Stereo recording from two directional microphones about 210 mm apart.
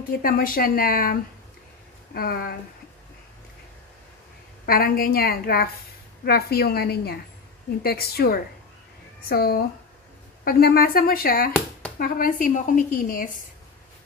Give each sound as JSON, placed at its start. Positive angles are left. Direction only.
{"t": 0.1, "sound": "speech", "side_deg": 45}
{"t": 2.1, "sound": "speech", "side_deg": 45}
{"t": 4.6, "sound": "a woman's voice", "side_deg": 45}